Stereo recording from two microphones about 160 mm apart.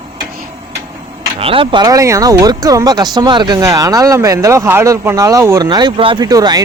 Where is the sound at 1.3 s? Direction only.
35° right (ahead or behind).